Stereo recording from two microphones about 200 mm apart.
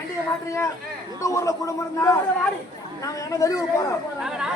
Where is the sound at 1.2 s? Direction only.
15° left (ahead or behind).